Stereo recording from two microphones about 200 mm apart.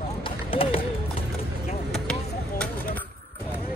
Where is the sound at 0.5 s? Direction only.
25° left (ahead or behind).